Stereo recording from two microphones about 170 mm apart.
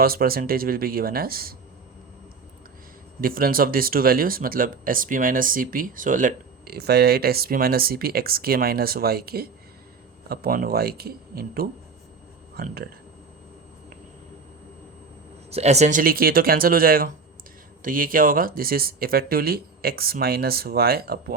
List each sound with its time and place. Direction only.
0.0 s speech: 60° right (ahead or behind)
3.2 s speech: 55° right (ahead or behind)
15.4 s speech: 40° right (ahead or behind); by 21.3 s 65° right (ahead or behind)